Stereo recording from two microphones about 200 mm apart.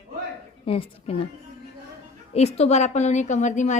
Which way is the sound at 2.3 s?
30° left (ahead or behind).